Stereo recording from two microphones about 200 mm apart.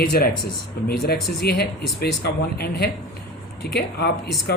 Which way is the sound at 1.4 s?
55° left (ahead or behind).